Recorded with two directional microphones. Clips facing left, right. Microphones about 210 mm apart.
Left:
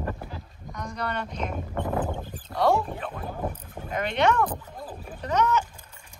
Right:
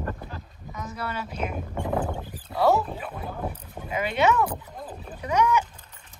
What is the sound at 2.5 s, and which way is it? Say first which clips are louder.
Rowboat: right 1 dB; 5° right (ahead or behind).